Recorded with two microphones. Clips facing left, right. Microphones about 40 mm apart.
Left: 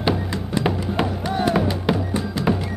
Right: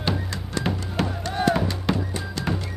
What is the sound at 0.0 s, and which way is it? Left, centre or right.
Music, centre.